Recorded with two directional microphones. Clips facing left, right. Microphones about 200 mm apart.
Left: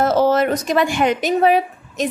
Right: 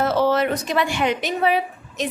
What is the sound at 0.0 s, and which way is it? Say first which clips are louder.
A woman's voice: left 3 dB; 45° left (ahead or behind).